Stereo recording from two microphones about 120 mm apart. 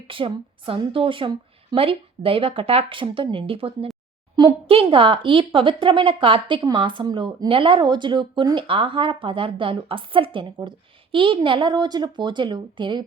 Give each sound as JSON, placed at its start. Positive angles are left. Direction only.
{"t": 0.1, "sound": "a woman's voice", "side_deg": -45}